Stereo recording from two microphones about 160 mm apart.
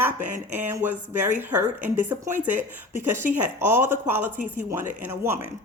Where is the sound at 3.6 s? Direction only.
15° right (ahead or behind).